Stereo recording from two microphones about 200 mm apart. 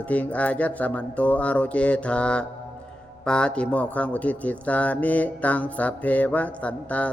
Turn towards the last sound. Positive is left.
turn(degrees=5)  # may be behind; listen again after turning